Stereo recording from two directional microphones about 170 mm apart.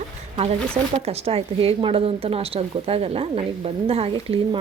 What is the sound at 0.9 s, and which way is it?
A woman's voice, 35° right (ahead or behind).